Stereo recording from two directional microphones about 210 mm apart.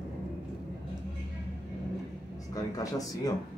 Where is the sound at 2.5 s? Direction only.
15° left (ahead or behind).